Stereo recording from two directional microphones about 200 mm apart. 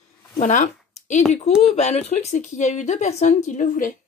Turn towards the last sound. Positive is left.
turn(degrees=40)  # may be behind; listen again after turning